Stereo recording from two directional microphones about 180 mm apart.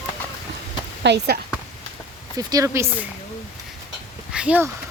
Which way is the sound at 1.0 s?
70° right (ahead or behind).